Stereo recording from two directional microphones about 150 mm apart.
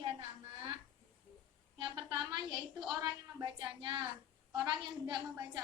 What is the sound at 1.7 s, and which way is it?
A woman's voice, 30° right (ahead or behind).